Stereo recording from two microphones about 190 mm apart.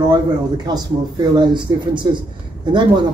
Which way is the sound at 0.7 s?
20° right (ahead or behind).